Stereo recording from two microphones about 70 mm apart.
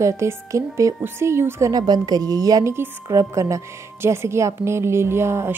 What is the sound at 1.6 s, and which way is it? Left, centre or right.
A woman's voice, right.